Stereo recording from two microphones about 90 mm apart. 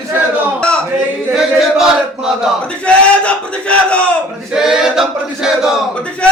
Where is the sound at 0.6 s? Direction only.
10° left (ahead or behind).